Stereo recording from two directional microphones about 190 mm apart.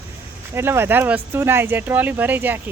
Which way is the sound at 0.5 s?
15° right (ahead or behind).